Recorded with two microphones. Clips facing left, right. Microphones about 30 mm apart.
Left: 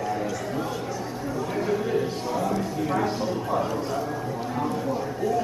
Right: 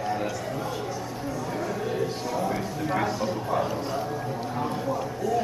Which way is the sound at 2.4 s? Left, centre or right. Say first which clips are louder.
Left 2 dB; centre.